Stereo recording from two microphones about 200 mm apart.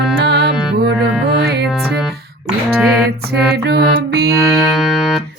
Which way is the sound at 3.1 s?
55° right (ahead or behind).